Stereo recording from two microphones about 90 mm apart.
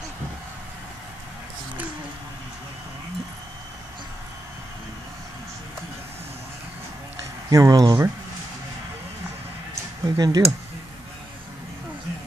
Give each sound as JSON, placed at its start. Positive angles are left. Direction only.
{"t": 7.4, "sound": "speech", "side_deg": -40}
{"t": 10.0, "sound": "speech", "side_deg": -45}